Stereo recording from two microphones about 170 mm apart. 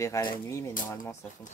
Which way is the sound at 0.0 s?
20° left (ahead or behind).